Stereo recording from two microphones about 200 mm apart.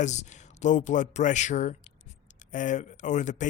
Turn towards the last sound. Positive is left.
turn(degrees=35)  # may be behind; listen again after turning